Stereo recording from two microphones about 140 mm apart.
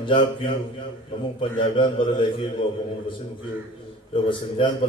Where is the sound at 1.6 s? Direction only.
35° left (ahead or behind).